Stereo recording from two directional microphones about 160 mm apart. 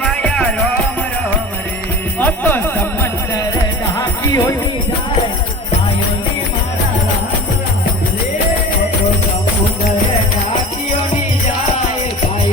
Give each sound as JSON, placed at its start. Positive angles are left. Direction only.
{"t": 0.0, "sound": "music", "side_deg": 5}
{"t": 2.1, "sound": "jingle bell", "side_deg": 10}